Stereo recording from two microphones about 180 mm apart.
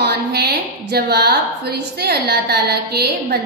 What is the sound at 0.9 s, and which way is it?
A woman's voice, 60° right (ahead or behind).